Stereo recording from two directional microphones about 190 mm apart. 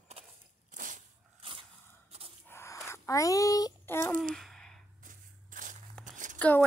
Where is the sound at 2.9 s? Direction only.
15° left (ahead or behind).